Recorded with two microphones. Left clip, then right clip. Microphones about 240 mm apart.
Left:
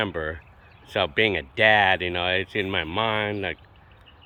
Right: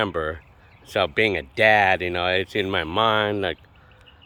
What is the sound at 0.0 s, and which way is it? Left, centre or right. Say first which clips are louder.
Speech: right 3 dB; centre.